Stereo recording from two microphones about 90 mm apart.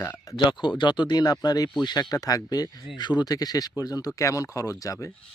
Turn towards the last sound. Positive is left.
turn(degrees=35)  # may be behind; listen again after turning